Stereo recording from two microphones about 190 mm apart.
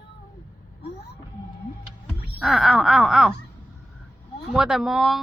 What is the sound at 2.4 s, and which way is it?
Speech, centre (ahead or behind).